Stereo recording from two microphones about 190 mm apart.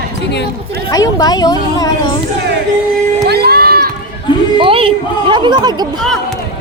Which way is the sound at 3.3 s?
55° right (ahead or behind).